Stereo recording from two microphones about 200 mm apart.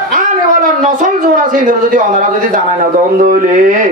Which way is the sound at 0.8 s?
40° right (ahead or behind).